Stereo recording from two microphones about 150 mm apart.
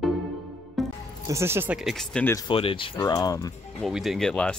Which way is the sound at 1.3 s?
15° right (ahead or behind).